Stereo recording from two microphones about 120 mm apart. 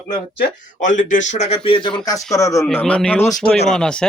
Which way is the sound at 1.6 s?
45° left (ahead or behind).